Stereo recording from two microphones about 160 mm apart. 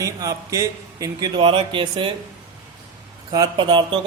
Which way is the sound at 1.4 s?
30° right (ahead or behind).